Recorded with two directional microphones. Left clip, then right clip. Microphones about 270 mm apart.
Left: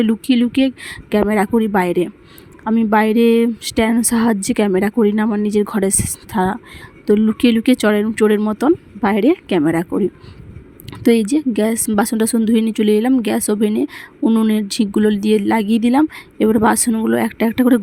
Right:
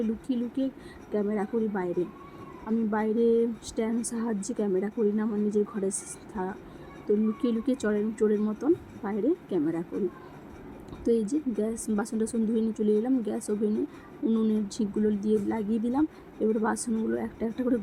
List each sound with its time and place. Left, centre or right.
0.3 s speech: left
8.4 s speech: left
11.0 s speech: left